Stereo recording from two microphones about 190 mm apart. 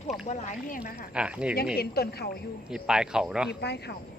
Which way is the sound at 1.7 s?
55° left (ahead or behind).